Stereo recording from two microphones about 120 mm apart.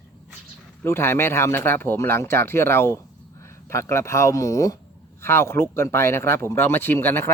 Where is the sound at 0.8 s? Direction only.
20° left (ahead or behind).